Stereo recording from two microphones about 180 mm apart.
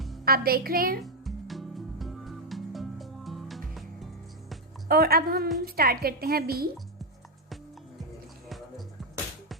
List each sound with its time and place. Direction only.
0.3 s a woman's voice: 55° right (ahead or behind)
1.0 s music: centre (ahead or behind)
4.9 s a woman's voice: 60° right (ahead or behind)